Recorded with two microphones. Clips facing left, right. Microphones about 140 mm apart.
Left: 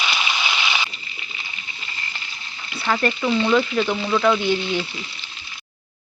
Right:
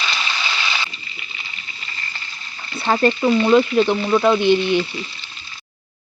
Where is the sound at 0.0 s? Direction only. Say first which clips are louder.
Left 1 dB; 15° left (ahead or behind).